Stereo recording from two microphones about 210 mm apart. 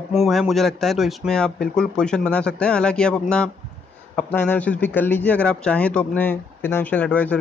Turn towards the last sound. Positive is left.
turn(degrees=5)  # may be behind; listen again after turning